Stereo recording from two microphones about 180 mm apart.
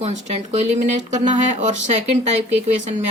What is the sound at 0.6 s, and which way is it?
Speech, 40° right (ahead or behind).